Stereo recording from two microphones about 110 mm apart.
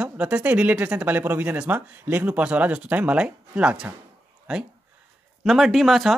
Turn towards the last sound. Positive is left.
turn(degrees=0)  # may be behind; listen again after turning